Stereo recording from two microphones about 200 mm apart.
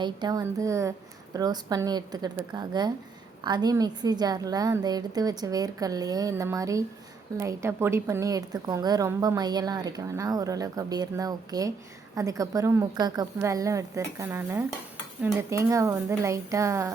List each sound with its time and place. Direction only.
0.0 s a woman's voice: 20° right (ahead or behind)